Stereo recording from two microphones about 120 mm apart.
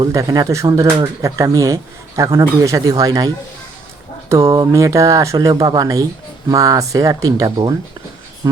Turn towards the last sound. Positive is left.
turn(degrees=-30)  # may be behind; listen again after turning